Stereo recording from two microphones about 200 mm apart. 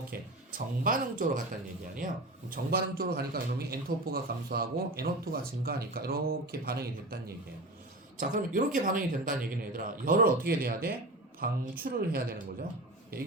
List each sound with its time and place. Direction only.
0.1 s speech: 45° right (ahead or behind)
2.5 s speech: 50° right (ahead or behind)